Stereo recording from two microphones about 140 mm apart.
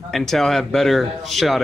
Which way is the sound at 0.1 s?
5° left (ahead or behind).